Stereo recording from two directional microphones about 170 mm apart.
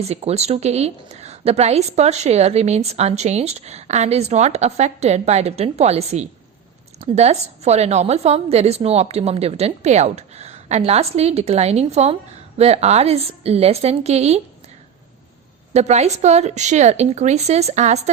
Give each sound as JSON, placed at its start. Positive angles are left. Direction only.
{"t": 0.0, "sound": "a woman's voice", "side_deg": -40}
{"t": 15.7, "sound": "a woman's voice", "side_deg": -40}